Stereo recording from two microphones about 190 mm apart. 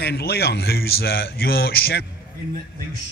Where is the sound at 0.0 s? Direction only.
55° left (ahead or behind).